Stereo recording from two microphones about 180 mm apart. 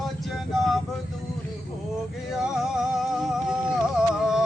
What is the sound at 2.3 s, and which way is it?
Male singing, centre (ahead or behind).